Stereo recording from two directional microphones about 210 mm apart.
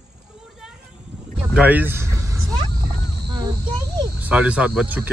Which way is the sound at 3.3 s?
20° right (ahead or behind).